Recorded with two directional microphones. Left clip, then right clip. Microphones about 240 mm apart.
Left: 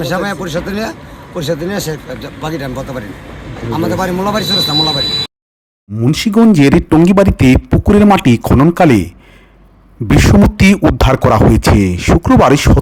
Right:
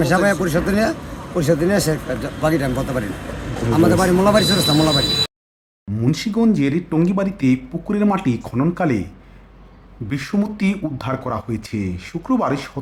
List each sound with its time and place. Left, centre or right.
0.0 s speech: centre
6.0 s a man's voice: left
10.1 s a man's voice: left